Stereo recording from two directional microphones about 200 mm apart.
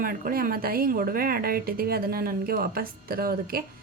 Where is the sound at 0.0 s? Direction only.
45° right (ahead or behind).